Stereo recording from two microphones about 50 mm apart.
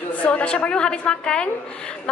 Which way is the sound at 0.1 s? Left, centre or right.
Left.